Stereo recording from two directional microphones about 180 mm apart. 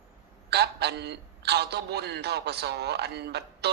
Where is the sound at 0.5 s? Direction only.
65° right (ahead or behind).